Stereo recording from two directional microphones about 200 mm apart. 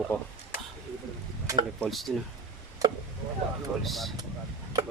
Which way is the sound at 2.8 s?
15° right (ahead or behind).